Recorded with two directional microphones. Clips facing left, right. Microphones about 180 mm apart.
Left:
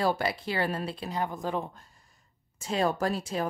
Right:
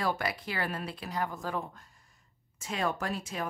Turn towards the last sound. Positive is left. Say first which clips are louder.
# left 6 dB
turn(degrees=35)  # may be behind; listen again after turning